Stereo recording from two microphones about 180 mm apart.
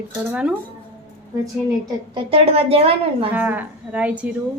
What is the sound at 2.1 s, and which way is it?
A woman's voice, 30° right (ahead or behind).